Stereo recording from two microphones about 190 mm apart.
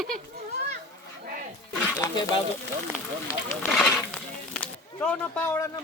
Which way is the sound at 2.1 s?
25° left (ahead or behind).